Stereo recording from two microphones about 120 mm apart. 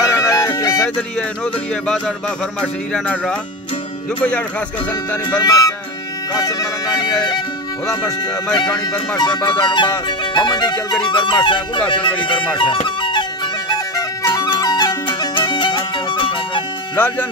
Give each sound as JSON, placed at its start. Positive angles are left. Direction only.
{"t": 0.0, "sound": "music", "side_deg": 25}
{"t": 0.9, "sound": "speech", "side_deg": 5}
{"t": 5.4, "sound": "speech", "side_deg": 30}
{"t": 9.1, "sound": "speech", "side_deg": 35}
{"t": 12.5, "sound": "music", "side_deg": 45}
{"t": 13.7, "sound": "music", "side_deg": 30}
{"t": 16.9, "sound": "speech", "side_deg": 15}